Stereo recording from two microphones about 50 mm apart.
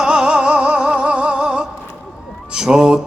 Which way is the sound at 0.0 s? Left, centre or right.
Centre.